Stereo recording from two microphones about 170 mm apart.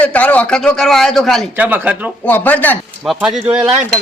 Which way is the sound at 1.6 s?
10° right (ahead or behind).